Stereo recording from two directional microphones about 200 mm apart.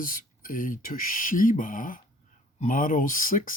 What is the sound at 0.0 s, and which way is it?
Speech, 45° left (ahead or behind).